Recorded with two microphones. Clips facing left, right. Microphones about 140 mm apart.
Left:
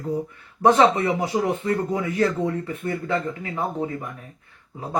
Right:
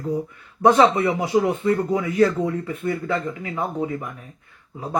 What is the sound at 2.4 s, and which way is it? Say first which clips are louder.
Speech: right 2 dB; 30° left (ahead or behind).